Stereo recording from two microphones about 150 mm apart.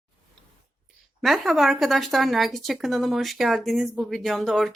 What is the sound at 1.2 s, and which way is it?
Speech, centre (ahead or behind).